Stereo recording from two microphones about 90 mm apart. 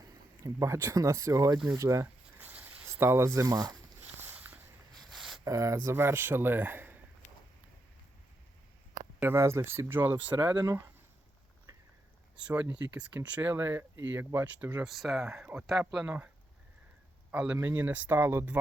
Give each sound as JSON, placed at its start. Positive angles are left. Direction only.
{"t": 0.4, "sound": "speech", "side_deg": -30}
{"t": 3.4, "sound": "speech", "side_deg": -45}
{"t": 5.1, "sound": "a sound", "side_deg": 0}
{"t": 5.5, "sound": "speech", "side_deg": -35}
{"t": 9.2, "sound": "speech", "side_deg": -30}
{"t": 10.3, "sound": "speech", "side_deg": -55}
{"t": 12.5, "sound": "speech", "side_deg": -15}
{"t": 14.8, "sound": "speech", "side_deg": 0}
{"t": 17.3, "sound": "speech", "side_deg": -10}
{"t": 17.6, "sound": "speech", "side_deg": -20}